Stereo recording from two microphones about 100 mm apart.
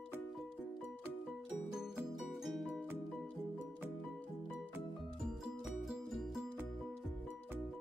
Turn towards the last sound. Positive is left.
turn(degrees=0)  # may be behind; listen again after turning